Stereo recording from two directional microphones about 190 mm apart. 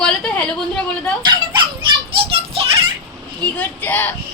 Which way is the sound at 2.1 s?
30° right (ahead or behind).